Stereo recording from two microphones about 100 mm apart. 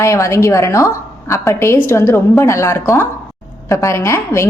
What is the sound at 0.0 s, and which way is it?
A woman's voice, 30° left (ahead or behind).